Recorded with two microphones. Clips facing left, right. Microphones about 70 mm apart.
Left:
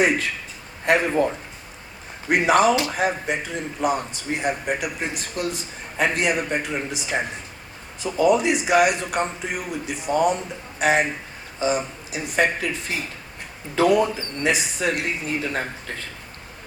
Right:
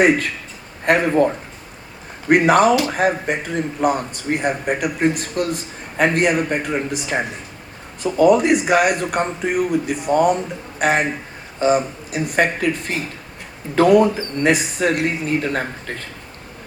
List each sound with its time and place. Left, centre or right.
0.0 s a man's voice: right
2.3 s a man's voice: right
8.0 s a man's voice: right